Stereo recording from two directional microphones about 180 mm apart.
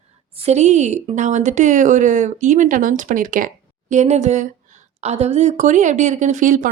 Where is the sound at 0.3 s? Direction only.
35° right (ahead or behind).